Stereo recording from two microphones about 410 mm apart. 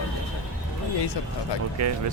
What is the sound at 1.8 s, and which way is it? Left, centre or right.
Speech, right.